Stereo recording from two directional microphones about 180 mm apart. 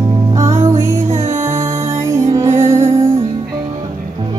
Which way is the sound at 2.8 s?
40° right (ahead or behind).